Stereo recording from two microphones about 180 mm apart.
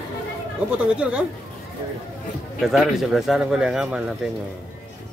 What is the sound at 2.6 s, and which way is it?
Speech, centre (ahead or behind).